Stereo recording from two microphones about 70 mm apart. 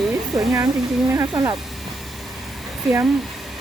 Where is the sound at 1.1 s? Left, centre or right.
Right.